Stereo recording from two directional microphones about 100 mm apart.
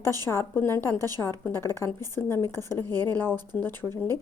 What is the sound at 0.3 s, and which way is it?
A woman's voice, 25° left (ahead or behind).